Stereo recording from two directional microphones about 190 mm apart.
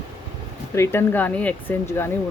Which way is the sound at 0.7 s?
15° left (ahead or behind).